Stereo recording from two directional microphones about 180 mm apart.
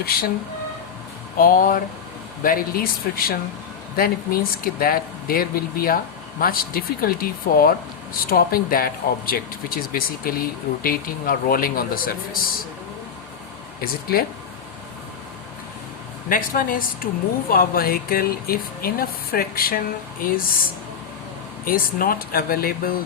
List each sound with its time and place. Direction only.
0.0 s speech: 55° left (ahead or behind)
1.4 s speech: 50° left (ahead or behind)
16.3 s speech: 50° left (ahead or behind)
21.6 s speech: 55° left (ahead or behind)